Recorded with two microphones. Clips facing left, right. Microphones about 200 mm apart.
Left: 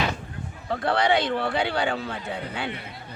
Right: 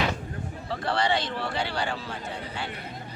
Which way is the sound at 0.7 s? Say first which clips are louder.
Left 4 dB; 55° left (ahead or behind).